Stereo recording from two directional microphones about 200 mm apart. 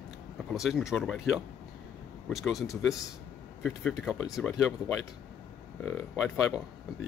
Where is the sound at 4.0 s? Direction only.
Centre (ahead or behind).